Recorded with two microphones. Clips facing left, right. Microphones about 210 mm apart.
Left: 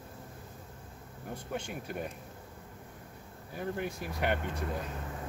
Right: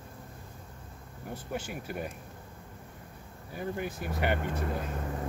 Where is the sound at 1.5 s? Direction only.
5° right (ahead or behind).